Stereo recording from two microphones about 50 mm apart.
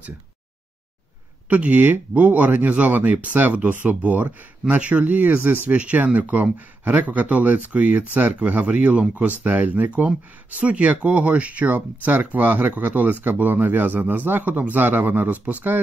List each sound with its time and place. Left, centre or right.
1.5 s speech: right
5.8 s speech: right